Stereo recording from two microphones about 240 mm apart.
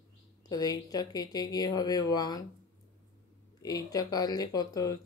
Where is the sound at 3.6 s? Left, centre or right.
Centre.